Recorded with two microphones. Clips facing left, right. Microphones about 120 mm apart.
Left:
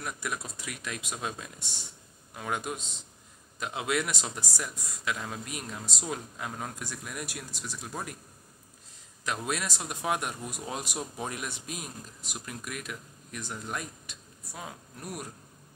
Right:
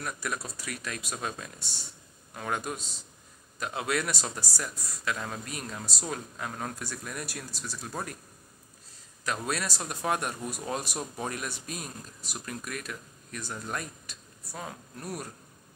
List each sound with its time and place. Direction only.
0.0 s a man's voice: 15° left (ahead or behind)
9.2 s a man's voice: 15° left (ahead or behind)